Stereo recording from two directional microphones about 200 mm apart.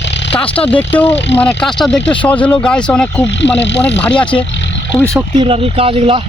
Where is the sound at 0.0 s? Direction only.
60° left (ahead or behind).